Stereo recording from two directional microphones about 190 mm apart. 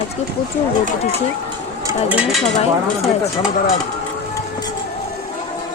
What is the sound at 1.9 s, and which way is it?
Speech, 5° right (ahead or behind).